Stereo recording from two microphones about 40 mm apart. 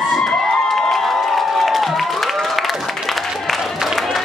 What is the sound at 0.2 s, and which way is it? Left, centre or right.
Cheering, centre.